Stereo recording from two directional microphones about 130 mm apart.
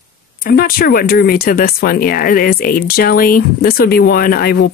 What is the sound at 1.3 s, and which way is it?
Speech, 90° left.